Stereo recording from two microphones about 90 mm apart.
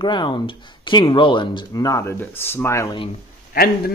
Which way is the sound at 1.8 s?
40° left (ahead or behind).